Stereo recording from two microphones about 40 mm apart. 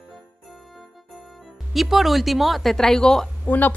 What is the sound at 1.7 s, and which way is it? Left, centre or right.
A woman's voice, centre.